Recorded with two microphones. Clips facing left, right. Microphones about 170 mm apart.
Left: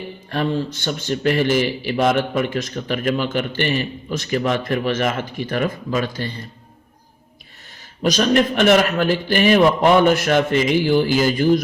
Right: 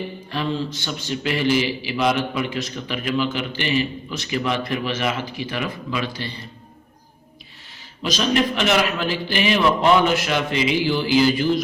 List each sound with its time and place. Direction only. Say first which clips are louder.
0.3 s a man's voice: left 4 dB; 50° left (ahead or behind)
8.0 s a man's voice: left 4 dB; 50° left (ahead or behind)